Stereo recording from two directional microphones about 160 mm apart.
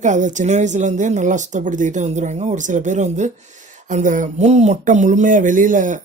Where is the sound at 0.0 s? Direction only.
50° right (ahead or behind).